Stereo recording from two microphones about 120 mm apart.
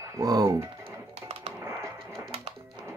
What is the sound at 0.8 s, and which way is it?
Music, 60° right (ahead or behind).